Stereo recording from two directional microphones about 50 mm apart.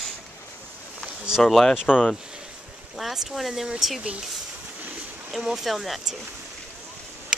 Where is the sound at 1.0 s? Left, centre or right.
Right.